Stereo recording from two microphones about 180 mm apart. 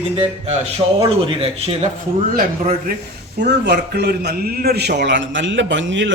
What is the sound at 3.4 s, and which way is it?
A man's voice, 65° right (ahead or behind).